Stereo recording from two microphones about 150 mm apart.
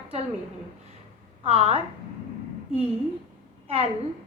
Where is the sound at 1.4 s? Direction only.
40° right (ahead or behind).